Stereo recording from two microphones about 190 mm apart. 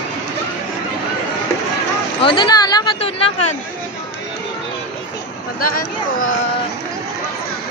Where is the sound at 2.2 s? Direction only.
25° left (ahead or behind).